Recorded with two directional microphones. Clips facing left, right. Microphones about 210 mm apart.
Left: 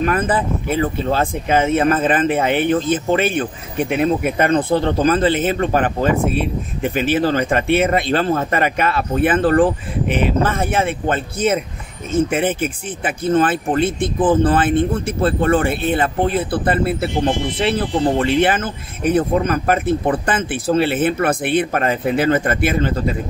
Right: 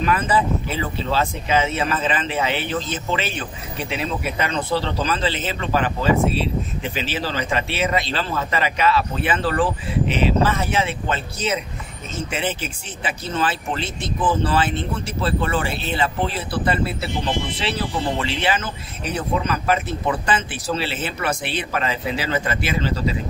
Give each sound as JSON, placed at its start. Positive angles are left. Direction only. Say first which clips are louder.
{"t": 0.0, "sound": "speech", "louder": "left 2 dB", "side_deg": 50}